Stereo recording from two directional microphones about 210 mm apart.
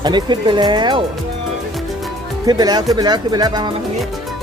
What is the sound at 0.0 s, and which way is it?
Speech, 20° right (ahead or behind).